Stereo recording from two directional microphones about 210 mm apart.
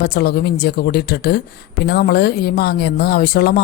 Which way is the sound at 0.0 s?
50° left (ahead or behind).